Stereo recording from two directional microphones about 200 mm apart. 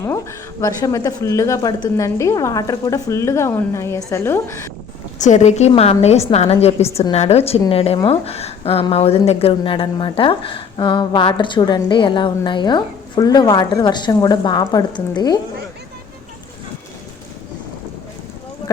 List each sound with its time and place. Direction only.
0.0 s speech: 15° left (ahead or behind)
5.1 s a woman's voice: 35° left (ahead or behind); by 15.4 s 20° left (ahead or behind)